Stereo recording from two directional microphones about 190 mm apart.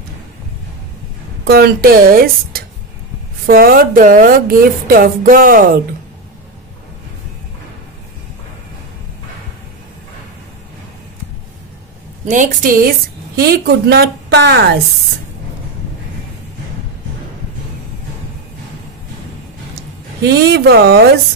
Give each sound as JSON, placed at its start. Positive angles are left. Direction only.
{"t": 1.4, "sound": "a woman's voice", "side_deg": -55}
{"t": 12.3, "sound": "a woman's voice", "side_deg": -45}
{"t": 20.2, "sound": "a woman's voice", "side_deg": -60}